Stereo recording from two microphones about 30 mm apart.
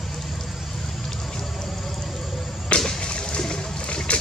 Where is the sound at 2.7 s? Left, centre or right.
Left.